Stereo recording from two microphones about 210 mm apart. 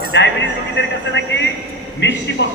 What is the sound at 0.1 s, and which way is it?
A man's voice, 55° left (ahead or behind).